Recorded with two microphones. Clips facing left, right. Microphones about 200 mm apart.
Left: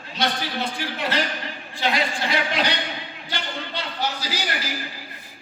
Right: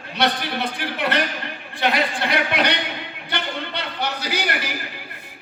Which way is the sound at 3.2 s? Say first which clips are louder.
Right 4 dB; 60° right (ahead or behind).